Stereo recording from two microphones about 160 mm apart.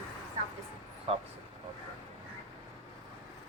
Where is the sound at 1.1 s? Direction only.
40° right (ahead or behind).